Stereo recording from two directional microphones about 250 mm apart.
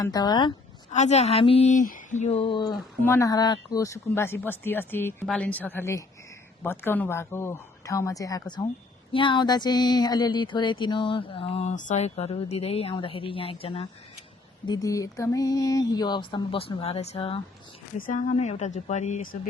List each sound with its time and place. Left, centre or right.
0.0 s speech: centre; by 19.4 s left